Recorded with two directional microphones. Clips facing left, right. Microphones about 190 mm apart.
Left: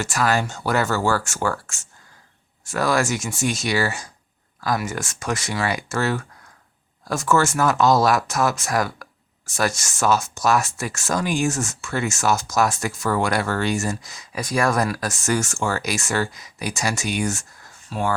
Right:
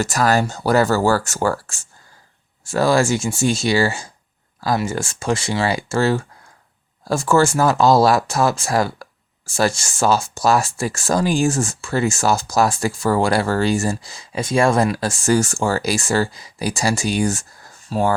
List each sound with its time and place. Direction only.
0.0 s speech: 40° right (ahead or behind)